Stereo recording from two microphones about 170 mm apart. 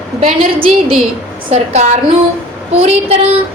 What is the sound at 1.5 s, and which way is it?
Speech, 40° right (ahead or behind).